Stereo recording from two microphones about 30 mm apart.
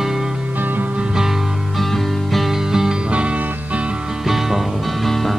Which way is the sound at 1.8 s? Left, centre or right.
Centre.